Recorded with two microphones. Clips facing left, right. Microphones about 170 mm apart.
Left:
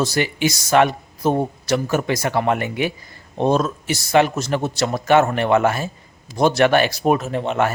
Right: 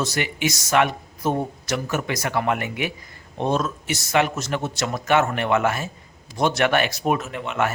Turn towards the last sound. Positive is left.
turn(degrees=35)  # may be behind; listen again after turning